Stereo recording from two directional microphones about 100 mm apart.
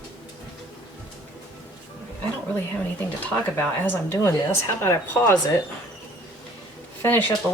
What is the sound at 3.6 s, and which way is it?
A woman's voice, 20° left (ahead or behind).